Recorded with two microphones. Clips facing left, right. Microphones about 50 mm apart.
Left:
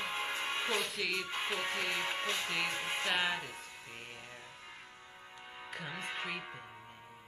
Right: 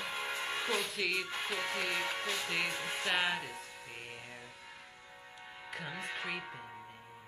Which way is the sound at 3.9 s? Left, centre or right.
Centre.